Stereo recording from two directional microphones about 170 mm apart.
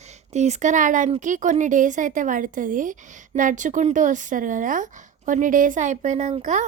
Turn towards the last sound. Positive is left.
turn(degrees=-40)  # may be behind; listen again after turning